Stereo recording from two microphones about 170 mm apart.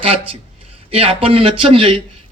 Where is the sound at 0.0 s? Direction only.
35° right (ahead or behind).